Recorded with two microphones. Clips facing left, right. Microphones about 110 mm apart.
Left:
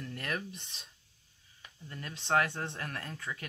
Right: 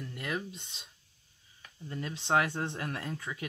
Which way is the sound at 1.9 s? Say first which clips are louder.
Right 2 dB; 20° right (ahead or behind).